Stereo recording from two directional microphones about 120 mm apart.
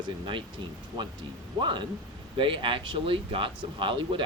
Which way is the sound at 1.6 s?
40° right (ahead or behind).